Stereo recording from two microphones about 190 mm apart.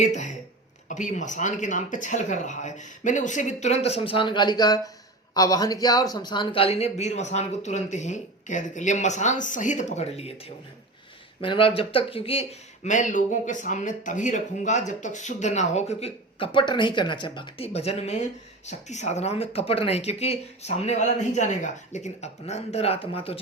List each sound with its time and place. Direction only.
0.0 s speech: 40° left (ahead or behind)
11.3 s speech: 25° left (ahead or behind)